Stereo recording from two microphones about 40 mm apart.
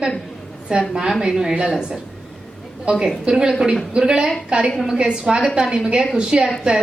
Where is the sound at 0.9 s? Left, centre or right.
Centre.